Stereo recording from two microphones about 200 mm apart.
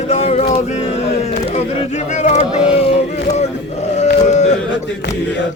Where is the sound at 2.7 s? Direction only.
30° left (ahead or behind).